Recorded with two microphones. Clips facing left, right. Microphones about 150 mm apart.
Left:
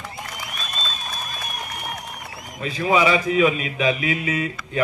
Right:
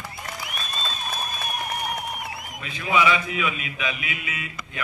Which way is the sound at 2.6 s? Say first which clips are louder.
Left 4 dB; 35° left (ahead or behind).